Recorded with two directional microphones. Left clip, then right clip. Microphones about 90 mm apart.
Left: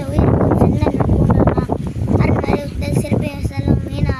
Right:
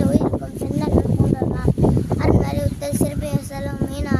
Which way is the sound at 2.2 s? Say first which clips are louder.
Left 7 dB; 35° right (ahead or behind).